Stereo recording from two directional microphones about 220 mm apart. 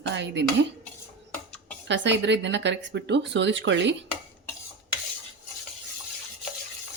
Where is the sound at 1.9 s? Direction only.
55° right (ahead or behind).